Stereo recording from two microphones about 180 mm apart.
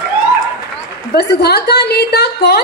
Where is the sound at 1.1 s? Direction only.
65° left (ahead or behind).